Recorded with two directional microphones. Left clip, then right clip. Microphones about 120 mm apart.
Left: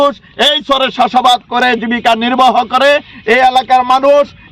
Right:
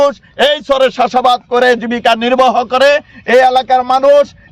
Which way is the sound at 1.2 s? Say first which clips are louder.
Left 1 dB; 35° right (ahead or behind).